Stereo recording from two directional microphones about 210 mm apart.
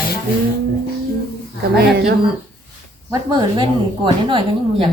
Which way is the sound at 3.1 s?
20° right (ahead or behind).